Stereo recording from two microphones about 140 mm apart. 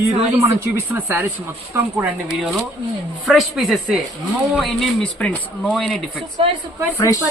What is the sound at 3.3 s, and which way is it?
Speech, centre (ahead or behind).